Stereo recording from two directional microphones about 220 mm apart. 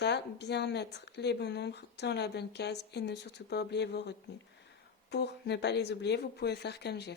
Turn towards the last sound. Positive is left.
turn(degrees=50)  # may be behind; listen again after turning